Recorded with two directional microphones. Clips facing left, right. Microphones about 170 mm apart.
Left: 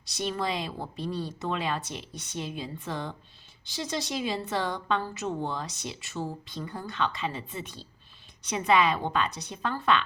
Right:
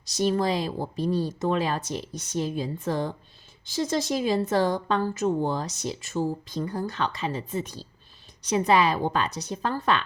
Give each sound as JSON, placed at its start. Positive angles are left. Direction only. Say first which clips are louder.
{"t": 0.0, "sound": "a woman's voice", "louder": "right 7 dB", "side_deg": -40}